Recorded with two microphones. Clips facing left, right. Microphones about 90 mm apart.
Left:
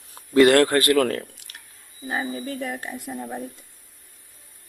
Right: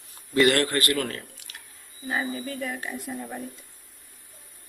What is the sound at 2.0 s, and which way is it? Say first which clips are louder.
Speech: left 1 dB; 20° left (ahead or behind).